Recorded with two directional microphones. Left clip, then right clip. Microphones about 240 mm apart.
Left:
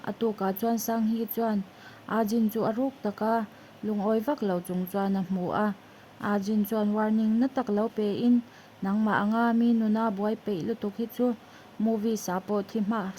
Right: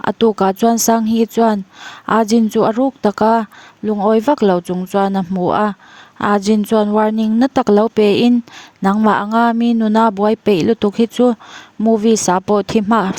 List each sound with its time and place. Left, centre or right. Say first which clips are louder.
0.0 s speech: right 16 dB; right